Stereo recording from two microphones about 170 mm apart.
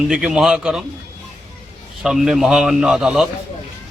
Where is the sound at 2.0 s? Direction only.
Centre (ahead or behind).